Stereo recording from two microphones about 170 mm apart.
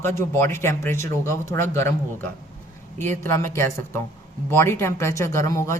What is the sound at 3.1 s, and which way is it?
A man's voice, 15° left (ahead or behind).